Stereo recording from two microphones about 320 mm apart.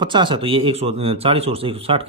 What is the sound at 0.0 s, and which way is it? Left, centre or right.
A man's voice, centre.